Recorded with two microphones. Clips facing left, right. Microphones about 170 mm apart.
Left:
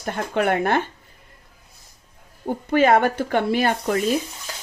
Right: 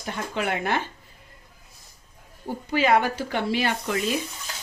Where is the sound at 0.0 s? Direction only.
55° left (ahead or behind).